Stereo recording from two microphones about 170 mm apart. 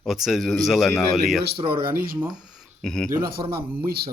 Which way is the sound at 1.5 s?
30° right (ahead or behind).